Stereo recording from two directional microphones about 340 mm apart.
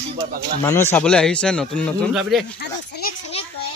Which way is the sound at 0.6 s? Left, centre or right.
Centre.